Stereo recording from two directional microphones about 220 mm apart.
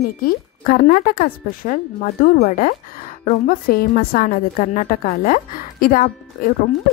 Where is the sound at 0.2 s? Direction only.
40° left (ahead or behind).